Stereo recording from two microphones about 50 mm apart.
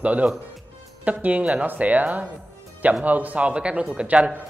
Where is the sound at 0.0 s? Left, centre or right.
Right.